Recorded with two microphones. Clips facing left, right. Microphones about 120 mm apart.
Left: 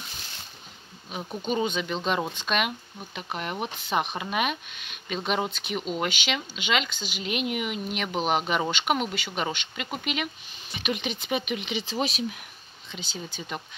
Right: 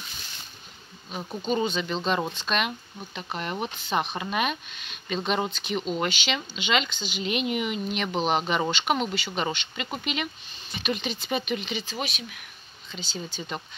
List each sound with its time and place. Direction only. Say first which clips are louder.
1.4 s speech: right 1 dB; 10° left (ahead or behind)
11.8 s speech: left 5 dB; 30° left (ahead or behind)
12.9 s speech: right 2 dB; 10° left (ahead or behind)